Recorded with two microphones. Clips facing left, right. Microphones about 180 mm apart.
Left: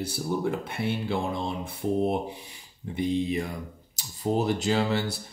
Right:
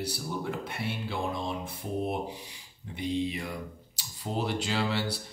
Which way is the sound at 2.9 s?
45° left (ahead or behind).